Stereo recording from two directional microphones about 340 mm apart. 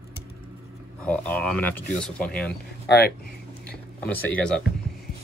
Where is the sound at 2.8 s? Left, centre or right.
Left.